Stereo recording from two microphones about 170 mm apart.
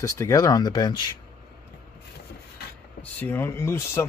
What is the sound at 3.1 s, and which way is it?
Speech, 10° left (ahead or behind).